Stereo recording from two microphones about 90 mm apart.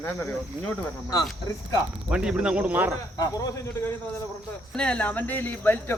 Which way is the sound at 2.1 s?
10° right (ahead or behind).